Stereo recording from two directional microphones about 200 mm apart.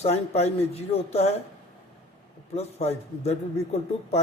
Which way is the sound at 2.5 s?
30° left (ahead or behind).